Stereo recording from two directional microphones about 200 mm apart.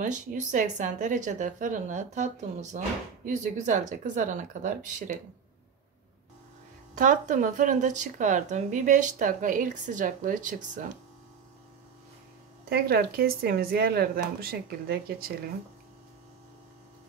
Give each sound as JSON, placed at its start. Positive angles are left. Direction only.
{"t": 0.0, "sound": "speech", "side_deg": -40}
{"t": 7.0, "sound": "speech", "side_deg": -40}
{"t": 12.6, "sound": "speech", "side_deg": -50}